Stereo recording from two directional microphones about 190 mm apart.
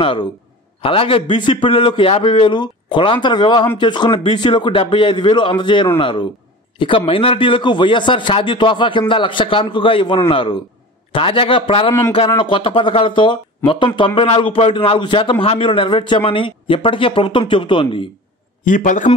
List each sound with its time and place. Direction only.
0.0 s a man's voice: 25° left (ahead or behind)
18.6 s a man's voice: 40° left (ahead or behind)